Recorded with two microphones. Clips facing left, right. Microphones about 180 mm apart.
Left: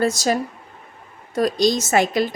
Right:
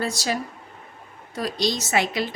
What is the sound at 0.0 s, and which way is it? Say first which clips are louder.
Speech: left 7 dB; 45° left (ahead or behind).